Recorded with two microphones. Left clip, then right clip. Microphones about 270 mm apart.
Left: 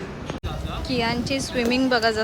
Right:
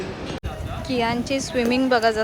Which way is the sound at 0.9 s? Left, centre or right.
Centre.